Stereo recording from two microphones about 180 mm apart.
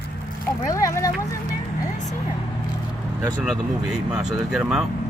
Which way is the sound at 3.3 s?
Centre (ahead or behind).